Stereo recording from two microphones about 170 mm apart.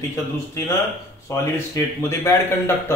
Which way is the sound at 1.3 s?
15° left (ahead or behind).